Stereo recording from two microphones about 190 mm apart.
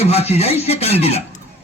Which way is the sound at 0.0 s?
35° left (ahead or behind).